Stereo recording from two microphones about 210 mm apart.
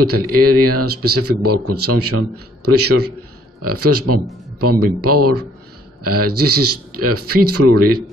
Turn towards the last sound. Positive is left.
turn(degrees=-90)